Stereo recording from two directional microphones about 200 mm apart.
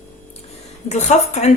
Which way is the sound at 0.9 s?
35° left (ahead or behind).